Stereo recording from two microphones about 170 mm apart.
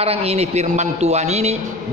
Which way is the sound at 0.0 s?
35° right (ahead or behind).